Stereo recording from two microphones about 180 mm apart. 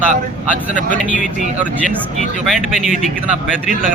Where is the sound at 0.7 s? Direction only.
45° right (ahead or behind).